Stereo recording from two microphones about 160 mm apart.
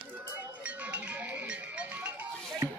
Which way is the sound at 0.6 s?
10° right (ahead or behind).